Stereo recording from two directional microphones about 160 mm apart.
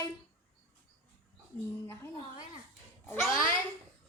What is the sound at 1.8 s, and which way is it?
A woman's voice, 15° left (ahead or behind).